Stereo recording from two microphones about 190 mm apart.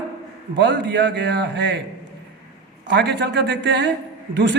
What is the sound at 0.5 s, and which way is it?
A woman's voice, 65° right (ahead or behind).